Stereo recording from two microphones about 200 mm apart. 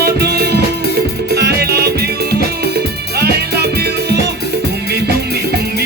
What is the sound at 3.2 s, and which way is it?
Music, 55° right (ahead or behind).